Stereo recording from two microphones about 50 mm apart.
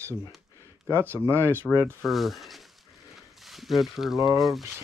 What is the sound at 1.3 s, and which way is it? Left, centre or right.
Speech, right.